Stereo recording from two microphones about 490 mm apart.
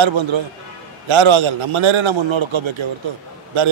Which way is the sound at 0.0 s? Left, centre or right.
Right.